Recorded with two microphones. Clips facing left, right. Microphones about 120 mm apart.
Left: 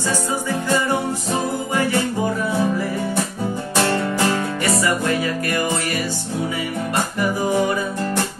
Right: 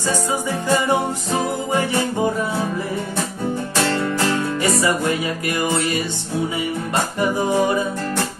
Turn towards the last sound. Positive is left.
turn(degrees=-25)  # may be behind; listen again after turning